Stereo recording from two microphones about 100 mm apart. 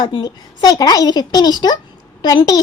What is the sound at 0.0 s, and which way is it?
A woman's voice, 45° left (ahead or behind).